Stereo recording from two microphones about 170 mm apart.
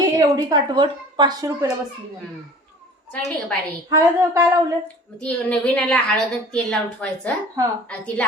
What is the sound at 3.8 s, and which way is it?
Speech, 20° right (ahead or behind).